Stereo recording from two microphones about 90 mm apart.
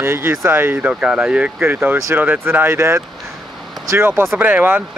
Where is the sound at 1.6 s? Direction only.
25° right (ahead or behind).